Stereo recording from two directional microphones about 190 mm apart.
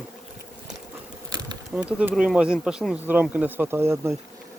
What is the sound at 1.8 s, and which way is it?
Speech, 5° right (ahead or behind).